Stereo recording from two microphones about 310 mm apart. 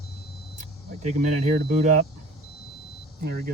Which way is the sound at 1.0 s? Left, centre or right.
Right.